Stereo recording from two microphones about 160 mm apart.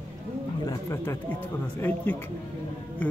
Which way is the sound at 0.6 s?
15° left (ahead or behind).